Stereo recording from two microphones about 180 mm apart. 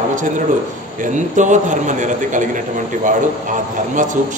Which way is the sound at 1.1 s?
45° right (ahead or behind).